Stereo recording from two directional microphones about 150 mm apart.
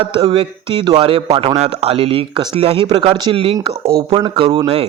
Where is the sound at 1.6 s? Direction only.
40° right (ahead or behind).